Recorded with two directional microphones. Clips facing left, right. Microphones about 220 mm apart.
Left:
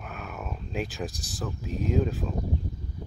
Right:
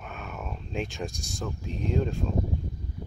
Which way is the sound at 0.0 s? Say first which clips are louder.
Left 1 dB; centre (ahead or behind).